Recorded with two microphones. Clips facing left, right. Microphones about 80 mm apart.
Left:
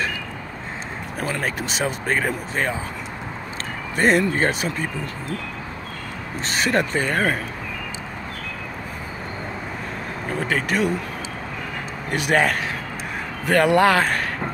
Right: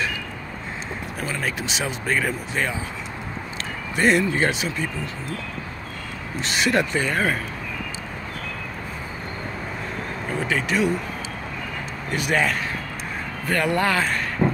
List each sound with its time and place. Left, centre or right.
1.2 s speech: left
3.9 s speech: left
6.4 s speech: left
10.5 s speech: left
12.1 s speech: left
13.5 s speech: left
14.0 s a sound: left